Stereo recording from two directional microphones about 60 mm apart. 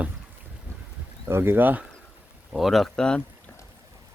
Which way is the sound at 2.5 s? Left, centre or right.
Centre.